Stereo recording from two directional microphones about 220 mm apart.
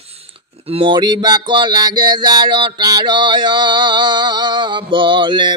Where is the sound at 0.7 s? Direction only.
25° right (ahead or behind).